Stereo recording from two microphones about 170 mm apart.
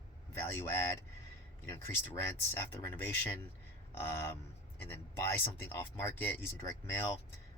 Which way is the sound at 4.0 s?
15° left (ahead or behind).